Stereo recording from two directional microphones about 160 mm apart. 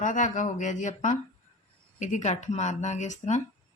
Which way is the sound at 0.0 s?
50° left (ahead or behind).